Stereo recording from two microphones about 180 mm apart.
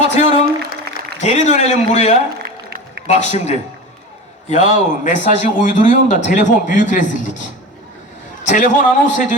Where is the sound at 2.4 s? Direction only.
60° right (ahead or behind).